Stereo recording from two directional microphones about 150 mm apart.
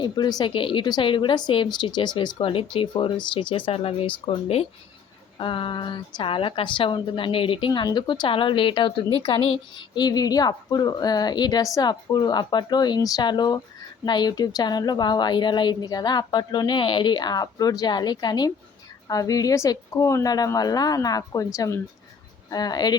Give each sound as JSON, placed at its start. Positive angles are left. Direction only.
{"t": 0.0, "sound": "a woman's voice", "side_deg": 30}